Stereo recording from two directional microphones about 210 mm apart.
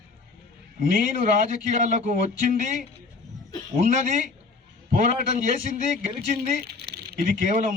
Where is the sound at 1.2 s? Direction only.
40° right (ahead or behind).